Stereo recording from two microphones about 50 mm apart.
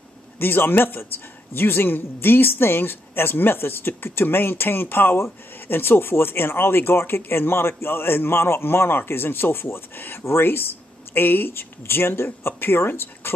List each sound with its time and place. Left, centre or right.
0.4 s a woman's voice: left